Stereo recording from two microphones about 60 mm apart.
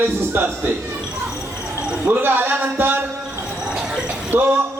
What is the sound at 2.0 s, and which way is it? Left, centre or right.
Speech, right.